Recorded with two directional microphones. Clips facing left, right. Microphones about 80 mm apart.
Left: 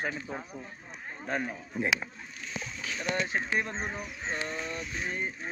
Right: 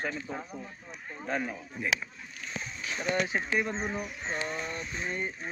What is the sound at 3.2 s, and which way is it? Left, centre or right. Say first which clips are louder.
Speech: right 1 dB; centre.